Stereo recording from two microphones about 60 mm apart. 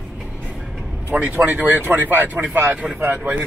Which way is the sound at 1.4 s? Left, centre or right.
Right.